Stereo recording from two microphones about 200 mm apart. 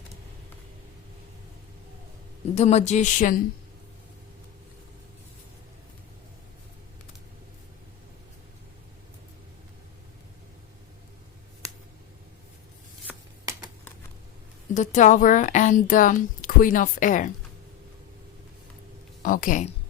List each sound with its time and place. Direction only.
2.6 s speech: 35° left (ahead or behind)
13.1 s shuffling cards: 15° right (ahead or behind)
14.7 s speech: 40° left (ahead or behind)
19.2 s speech: 40° left (ahead or behind)